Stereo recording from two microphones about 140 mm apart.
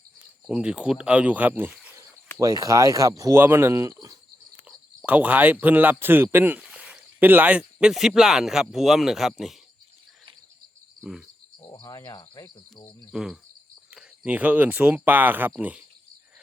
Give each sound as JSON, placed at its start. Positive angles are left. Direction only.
{"t": 0.4, "sound": "speech", "side_deg": -5}
{"t": 2.4, "sound": "speech", "side_deg": -25}
{"t": 5.0, "sound": "speech", "side_deg": -10}
{"t": 11.7, "sound": "cricket", "side_deg": 25}
{"t": 13.1, "sound": "cricket", "side_deg": -5}
{"t": 13.9, "sound": "speech", "side_deg": -10}